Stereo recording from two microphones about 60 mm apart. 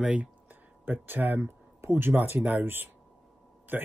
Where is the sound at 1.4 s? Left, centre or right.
Right.